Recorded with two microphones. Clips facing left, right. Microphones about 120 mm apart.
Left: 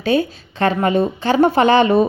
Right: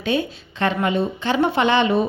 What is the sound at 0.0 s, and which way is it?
A woman's voice, 40° left (ahead or behind).